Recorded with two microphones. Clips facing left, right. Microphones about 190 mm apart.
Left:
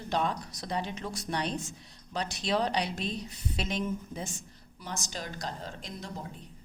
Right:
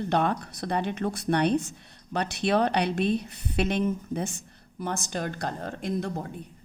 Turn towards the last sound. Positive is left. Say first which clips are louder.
# right 11 dB
turn(degrees=-55)  # may be behind; listen again after turning